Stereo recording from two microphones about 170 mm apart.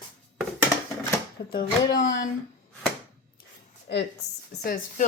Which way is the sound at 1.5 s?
75° left (ahead or behind).